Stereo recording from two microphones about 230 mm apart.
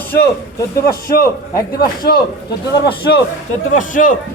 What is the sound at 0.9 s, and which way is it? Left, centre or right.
Speech, left.